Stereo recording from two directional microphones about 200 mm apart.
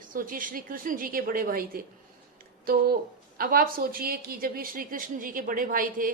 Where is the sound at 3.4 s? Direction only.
45° right (ahead or behind).